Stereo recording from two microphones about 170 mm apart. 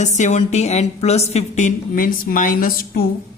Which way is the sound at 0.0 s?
45° left (ahead or behind).